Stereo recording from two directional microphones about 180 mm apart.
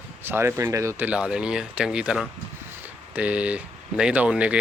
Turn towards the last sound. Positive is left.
turn(degrees=-5)  # may be behind; listen again after turning